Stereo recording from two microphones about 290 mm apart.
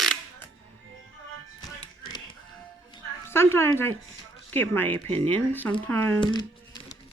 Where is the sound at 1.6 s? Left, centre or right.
Centre.